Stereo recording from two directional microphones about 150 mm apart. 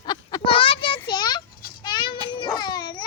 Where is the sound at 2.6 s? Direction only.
30° left (ahead or behind).